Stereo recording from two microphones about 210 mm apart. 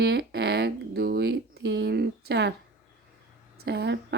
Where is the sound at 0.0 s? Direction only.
55° right (ahead or behind).